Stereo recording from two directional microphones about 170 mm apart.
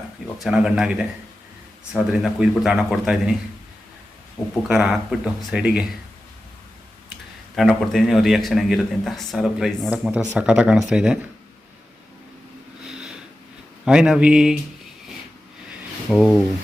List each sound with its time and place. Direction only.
0.4 s a man's voice: 5° right (ahead or behind)
4.4 s speech: 20° left (ahead or behind)
4.7 s a man's voice: 5° right (ahead or behind)
7.5 s a man's voice: centre (ahead or behind)
12.8 s a sound: 5° right (ahead or behind)
13.8 s a man's voice: 5° right (ahead or behind)
16.0 s a man's voice: 5° left (ahead or behind)